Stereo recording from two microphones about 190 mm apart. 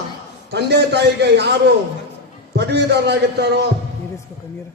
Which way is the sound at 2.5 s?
60° right (ahead or behind).